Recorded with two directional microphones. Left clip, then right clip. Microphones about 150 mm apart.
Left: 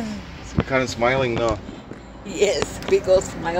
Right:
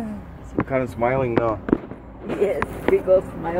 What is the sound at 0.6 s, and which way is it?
Speech, 40° left (ahead or behind).